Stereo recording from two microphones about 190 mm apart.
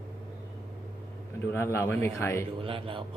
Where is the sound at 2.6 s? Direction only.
30° right (ahead or behind).